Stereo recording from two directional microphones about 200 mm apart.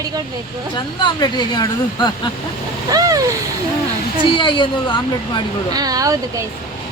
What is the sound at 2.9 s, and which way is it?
Speech, 15° right (ahead or behind).